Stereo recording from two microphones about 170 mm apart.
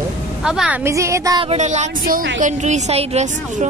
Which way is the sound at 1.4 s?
40° right (ahead or behind).